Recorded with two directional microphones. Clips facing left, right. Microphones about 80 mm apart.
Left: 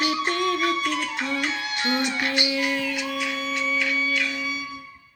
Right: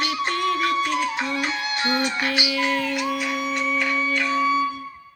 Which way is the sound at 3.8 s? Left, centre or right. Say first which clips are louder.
Right 2 dB; right.